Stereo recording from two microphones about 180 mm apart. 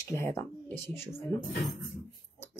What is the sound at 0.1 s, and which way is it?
Speech, 15° left (ahead or behind).